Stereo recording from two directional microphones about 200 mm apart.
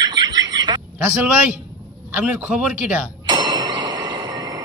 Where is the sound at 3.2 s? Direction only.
20° right (ahead or behind).